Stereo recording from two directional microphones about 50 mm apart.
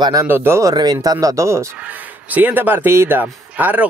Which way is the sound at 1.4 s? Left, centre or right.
Right.